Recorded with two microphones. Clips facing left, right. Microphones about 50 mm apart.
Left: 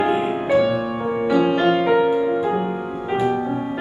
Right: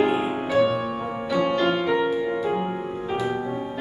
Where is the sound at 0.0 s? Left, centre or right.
Centre.